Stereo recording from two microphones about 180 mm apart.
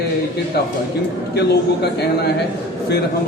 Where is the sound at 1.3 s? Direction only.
65° left (ahead or behind).